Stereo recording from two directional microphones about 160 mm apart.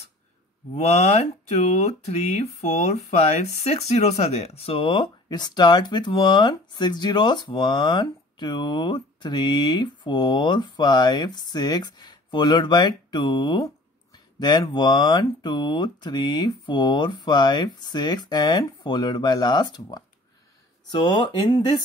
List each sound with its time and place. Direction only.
0.7 s speech: 45° left (ahead or behind); by 21.8 s 30° left (ahead or behind)